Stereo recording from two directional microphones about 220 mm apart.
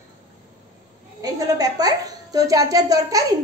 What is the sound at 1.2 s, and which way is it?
A child's voice, 15° right (ahead or behind).